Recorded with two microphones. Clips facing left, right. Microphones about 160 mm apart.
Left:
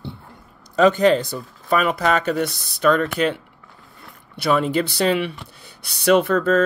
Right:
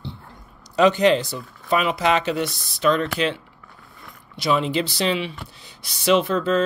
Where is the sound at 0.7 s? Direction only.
45° left (ahead or behind).